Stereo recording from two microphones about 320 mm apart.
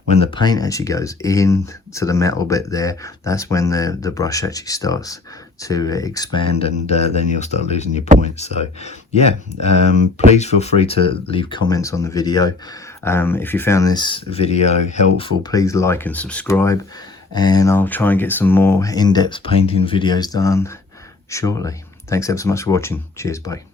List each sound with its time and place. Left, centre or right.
0.2 s speech: centre